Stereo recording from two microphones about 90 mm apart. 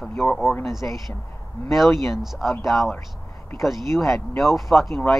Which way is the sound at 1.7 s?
Centre (ahead or behind).